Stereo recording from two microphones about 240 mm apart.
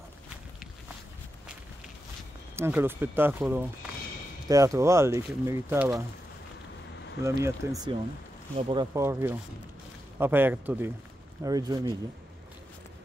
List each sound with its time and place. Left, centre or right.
2.5 s speech: centre
7.2 s speech: centre